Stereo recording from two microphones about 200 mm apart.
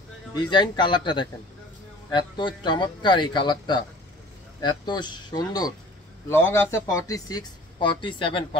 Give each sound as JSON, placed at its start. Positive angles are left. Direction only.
{"t": 0.3, "sound": "a man's voice", "side_deg": 20}